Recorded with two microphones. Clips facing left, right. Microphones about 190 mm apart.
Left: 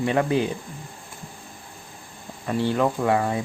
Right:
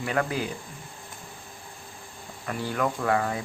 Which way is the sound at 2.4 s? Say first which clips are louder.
Left 6 dB; 25° left (ahead or behind).